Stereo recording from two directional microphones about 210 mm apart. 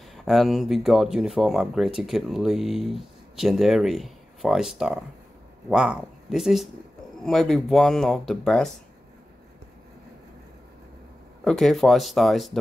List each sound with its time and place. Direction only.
0.1 s speech: centre (ahead or behind)
11.4 s speech: centre (ahead or behind)